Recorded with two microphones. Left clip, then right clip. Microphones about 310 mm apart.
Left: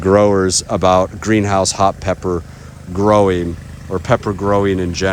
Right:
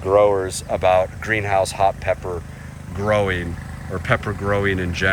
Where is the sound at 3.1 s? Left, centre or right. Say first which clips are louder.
Left 6 dB; centre.